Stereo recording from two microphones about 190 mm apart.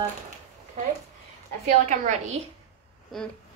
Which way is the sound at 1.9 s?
40° right (ahead or behind).